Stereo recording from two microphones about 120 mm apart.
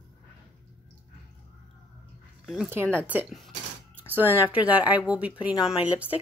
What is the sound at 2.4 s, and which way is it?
Speech, centre (ahead or behind).